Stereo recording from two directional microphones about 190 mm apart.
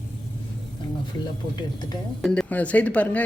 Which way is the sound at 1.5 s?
20° left (ahead or behind).